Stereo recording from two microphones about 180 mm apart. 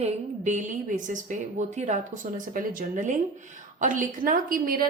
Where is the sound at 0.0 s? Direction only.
40° right (ahead or behind).